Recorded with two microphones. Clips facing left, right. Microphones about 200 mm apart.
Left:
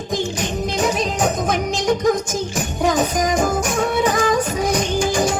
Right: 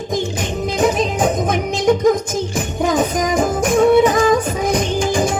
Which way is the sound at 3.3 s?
55° right (ahead or behind).